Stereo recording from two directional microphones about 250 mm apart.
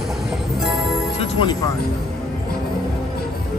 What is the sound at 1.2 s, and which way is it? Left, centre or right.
Music, centre.